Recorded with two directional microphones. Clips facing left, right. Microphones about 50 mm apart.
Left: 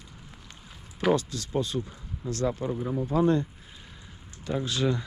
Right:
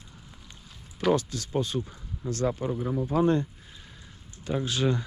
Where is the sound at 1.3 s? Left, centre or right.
Right.